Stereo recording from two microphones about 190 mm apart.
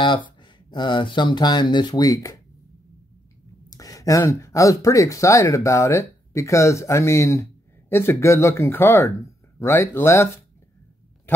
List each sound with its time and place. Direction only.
0.0 s speech: 25° left (ahead or behind)
3.7 s speech: 20° left (ahead or behind)